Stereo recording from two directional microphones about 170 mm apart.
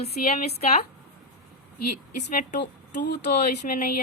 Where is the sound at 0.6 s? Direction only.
40° left (ahead or behind).